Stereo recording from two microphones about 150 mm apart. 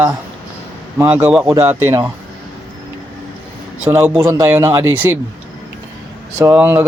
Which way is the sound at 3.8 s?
10° right (ahead or behind).